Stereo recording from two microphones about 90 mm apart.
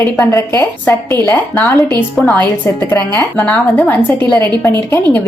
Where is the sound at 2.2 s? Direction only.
5° left (ahead or behind).